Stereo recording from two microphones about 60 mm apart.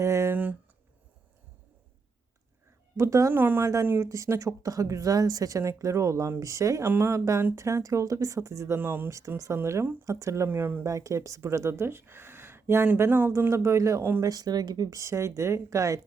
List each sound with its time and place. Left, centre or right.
0.0 s speech: right
3.0 s a woman's voice: right
3.3 s speech: right
3.6 s a woman's voice: right
3.8 s speech: right
4.1 s a woman's voice: right
6.8 s speech: right
7.5 s a woman's voice: right
9.0 s a woman's voice: right
10.6 s speech: right
10.8 s speech: right
13.1 s speech: right
13.5 s a woman's voice: right
14.2 s a woman's voice: right